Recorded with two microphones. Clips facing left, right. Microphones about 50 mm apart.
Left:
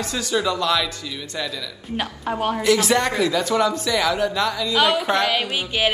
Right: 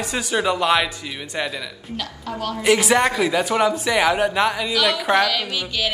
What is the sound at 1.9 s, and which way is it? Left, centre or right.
Speech, left.